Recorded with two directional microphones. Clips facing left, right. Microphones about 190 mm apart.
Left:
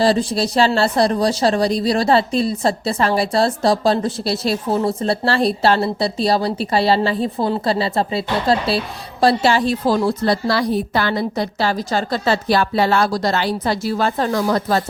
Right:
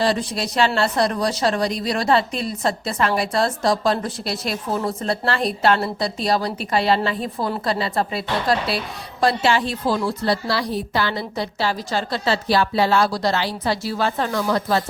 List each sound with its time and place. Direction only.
0.0 s a woman's voice: 30° left (ahead or behind)